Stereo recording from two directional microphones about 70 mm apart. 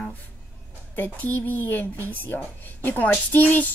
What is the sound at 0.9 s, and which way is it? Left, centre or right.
Speech, left.